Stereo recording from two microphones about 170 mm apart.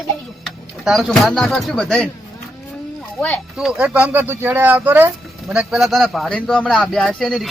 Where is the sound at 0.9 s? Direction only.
Centre (ahead or behind).